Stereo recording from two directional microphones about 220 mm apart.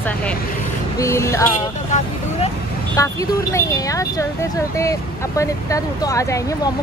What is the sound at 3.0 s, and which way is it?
Speech, 15° left (ahead or behind).